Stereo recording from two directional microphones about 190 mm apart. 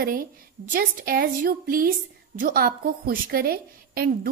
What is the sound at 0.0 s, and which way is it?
A woman's voice, 45° right (ahead or behind).